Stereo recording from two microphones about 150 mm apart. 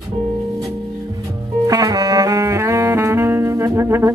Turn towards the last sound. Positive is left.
turn(degrees=-15)  # may be behind; listen again after turning